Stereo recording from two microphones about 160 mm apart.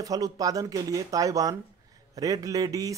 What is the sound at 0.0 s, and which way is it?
Speech, 20° right (ahead or behind).